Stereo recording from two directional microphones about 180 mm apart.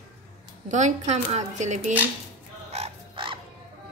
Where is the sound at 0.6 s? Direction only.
40° right (ahead or behind).